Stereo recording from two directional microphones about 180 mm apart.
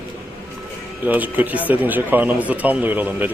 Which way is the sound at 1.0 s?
10° right (ahead or behind).